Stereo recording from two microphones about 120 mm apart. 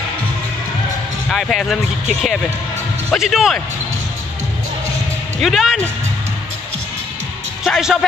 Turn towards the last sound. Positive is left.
turn(degrees=-5)  # may be behind; listen again after turning